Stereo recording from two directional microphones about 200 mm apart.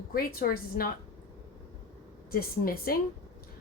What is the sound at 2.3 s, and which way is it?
Speech, 50° left (ahead or behind).